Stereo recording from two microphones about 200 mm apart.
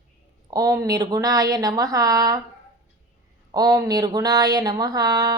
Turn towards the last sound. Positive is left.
turn(degrees=-20)  # may be behind; listen again after turning